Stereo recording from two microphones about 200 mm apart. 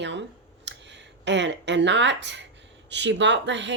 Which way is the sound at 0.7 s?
60° right (ahead or behind).